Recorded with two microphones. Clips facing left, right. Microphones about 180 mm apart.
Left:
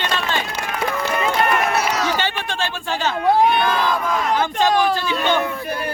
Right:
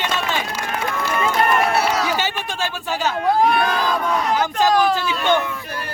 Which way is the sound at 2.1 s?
10° right (ahead or behind).